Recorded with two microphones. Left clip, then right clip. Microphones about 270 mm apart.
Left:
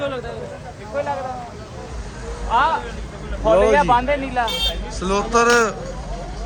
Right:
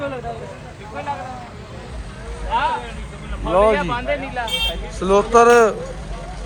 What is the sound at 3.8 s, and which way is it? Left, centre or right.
Speech, left.